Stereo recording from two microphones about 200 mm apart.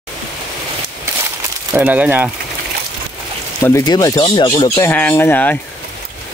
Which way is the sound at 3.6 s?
15° left (ahead or behind).